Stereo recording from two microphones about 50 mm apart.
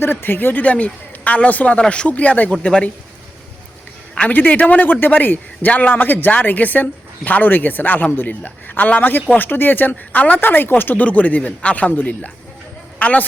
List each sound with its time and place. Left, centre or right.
0.0 s a man's voice: left
4.3 s a man's voice: left
10.9 s a man's voice: left
13.0 s a man's voice: left